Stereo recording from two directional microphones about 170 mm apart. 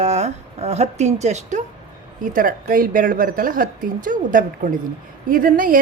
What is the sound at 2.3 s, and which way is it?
A woman's voice, 55° right (ahead or behind).